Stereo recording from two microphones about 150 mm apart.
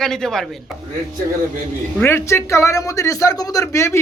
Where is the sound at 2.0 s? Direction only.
15° left (ahead or behind).